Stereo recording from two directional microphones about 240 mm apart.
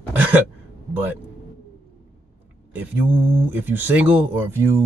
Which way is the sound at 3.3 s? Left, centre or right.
Centre.